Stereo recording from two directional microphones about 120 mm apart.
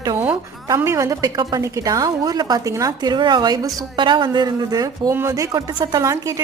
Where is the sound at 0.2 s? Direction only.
15° right (ahead or behind).